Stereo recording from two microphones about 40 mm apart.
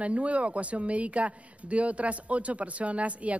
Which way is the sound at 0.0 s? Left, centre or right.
Right.